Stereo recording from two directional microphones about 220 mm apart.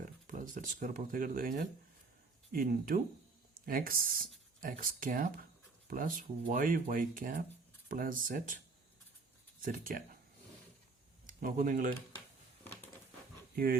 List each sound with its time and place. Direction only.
0.3 s speech: 35° right (ahead or behind)
11.3 s speech: 35° right (ahead or behind)